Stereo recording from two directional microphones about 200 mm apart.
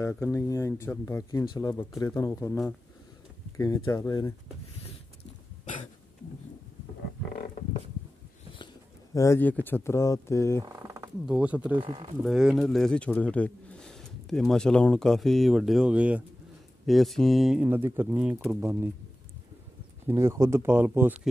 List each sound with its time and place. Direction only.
0.0 s speech: 10° left (ahead or behind)
9.1 s speech: 15° left (ahead or behind)
10.6 s a sound: 20° right (ahead or behind)
11.2 s speech: 5° right (ahead or behind)
11.8 s speech: 25° right (ahead or behind)
12.3 s speech: centre (ahead or behind)
20.1 s speech: 15° right (ahead or behind)